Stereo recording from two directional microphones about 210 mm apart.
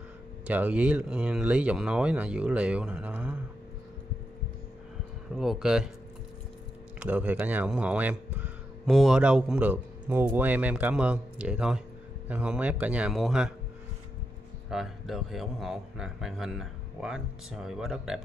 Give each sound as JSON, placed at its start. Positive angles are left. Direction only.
{"t": 0.5, "sound": "speech", "side_deg": -5}
{"t": 5.3, "sound": "speech", "side_deg": 0}
{"t": 7.0, "sound": "speech", "side_deg": -5}
{"t": 14.7, "sound": "speech", "side_deg": 0}